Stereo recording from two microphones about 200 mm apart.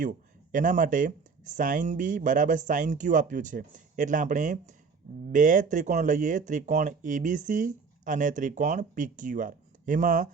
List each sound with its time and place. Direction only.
0.5 s speech: 40° right (ahead or behind)